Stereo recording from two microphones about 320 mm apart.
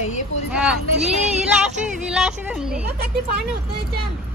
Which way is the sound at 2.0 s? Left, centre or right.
Centre.